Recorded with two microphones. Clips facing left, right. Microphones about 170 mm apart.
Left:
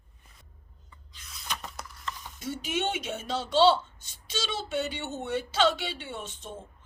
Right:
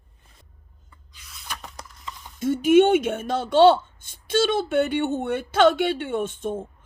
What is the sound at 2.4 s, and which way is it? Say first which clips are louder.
Speech: right 15 dB; 50° right (ahead or behind).